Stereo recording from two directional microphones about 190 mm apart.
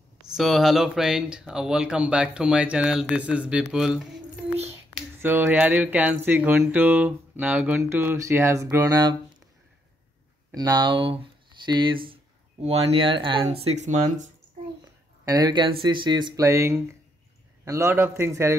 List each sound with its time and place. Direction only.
0.2 s speech: centre (ahead or behind); by 9.1 s 20° right (ahead or behind)
10.5 s speech: 20° right (ahead or behind); by 14.3 s 40° right (ahead or behind)
15.2 s speech: 20° right (ahead or behind)